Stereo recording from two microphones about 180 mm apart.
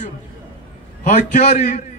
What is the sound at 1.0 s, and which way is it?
Speech, 45° left (ahead or behind).